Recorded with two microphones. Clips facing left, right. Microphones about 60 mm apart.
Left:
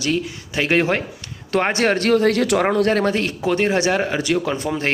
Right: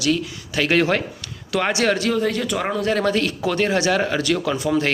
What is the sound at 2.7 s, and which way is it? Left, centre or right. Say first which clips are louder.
Speech: left 4 dB; left.